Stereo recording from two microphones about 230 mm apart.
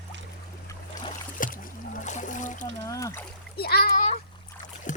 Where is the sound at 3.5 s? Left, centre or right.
Left.